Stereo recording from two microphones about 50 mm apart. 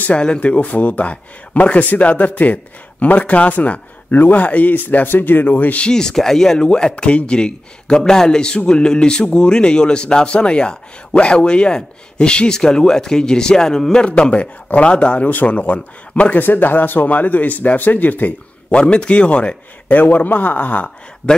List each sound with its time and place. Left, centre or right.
0.2 s speech: left
5.8 s a man's voice: centre
16.4 s speech: left
18.7 s a man's voice: left
20.0 s speech: left